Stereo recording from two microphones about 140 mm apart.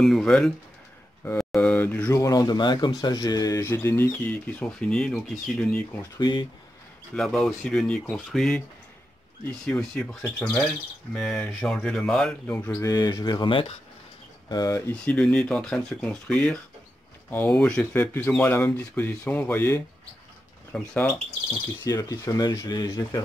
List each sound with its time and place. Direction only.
0.0 s speech: 5° left (ahead or behind)
2.1 s speech: 25° left (ahead or behind); by 5.9 s 5° left (ahead or behind)
6.1 s speech: 30° left (ahead or behind)
7.2 s speech: 5° left (ahead or behind)
9.7 s speech: 10° left (ahead or behind); by 13.7 s 40° left (ahead or behind)
14.5 s speech: 25° left (ahead or behind)
14.9 s speech: 10° left (ahead or behind)
21.8 s speech: 25° left (ahead or behind)